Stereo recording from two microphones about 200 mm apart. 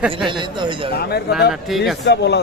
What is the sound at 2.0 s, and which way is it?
Speech, 55° left (ahead or behind).